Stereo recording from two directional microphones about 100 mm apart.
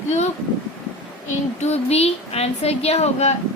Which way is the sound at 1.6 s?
90° left.